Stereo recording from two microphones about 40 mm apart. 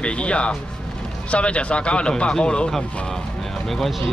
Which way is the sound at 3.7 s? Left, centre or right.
Centre.